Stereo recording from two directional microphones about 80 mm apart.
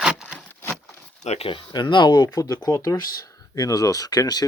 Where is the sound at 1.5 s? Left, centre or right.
Left.